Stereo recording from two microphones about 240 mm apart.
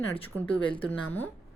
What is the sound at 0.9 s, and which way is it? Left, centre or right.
Speech, centre.